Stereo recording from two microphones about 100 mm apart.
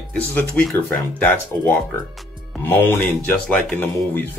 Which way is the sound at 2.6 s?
20° left (ahead or behind).